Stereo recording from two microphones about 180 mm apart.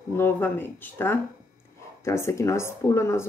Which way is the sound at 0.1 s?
10° left (ahead or behind).